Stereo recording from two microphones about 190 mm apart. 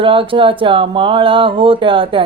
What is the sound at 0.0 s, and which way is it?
Mantra, 25° right (ahead or behind).